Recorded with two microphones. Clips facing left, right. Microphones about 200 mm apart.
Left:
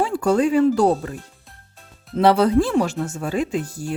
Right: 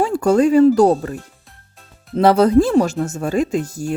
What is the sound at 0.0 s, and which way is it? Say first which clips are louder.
Speech: right 4 dB; 45° right (ahead or behind).